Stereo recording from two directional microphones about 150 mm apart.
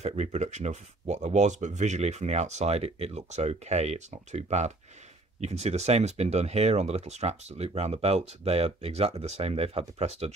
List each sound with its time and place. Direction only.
0.0 s speech: 45° right (ahead or behind)